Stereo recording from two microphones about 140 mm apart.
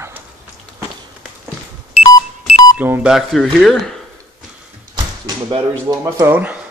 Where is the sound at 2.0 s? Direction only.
55° left (ahead or behind).